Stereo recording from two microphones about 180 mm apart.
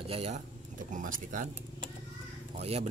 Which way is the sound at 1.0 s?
50° right (ahead or behind).